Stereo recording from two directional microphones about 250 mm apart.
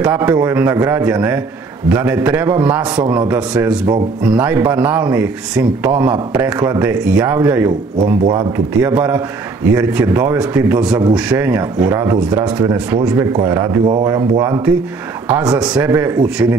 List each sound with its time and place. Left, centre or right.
0.0 s speech: centre
8.7 s speech: centre